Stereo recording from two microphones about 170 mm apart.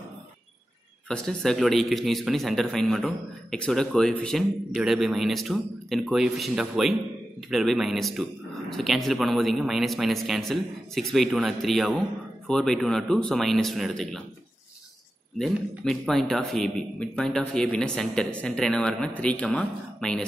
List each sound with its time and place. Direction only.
1.0 s a man's voice: 5° left (ahead or behind)
15.3 s a man's voice: centre (ahead or behind)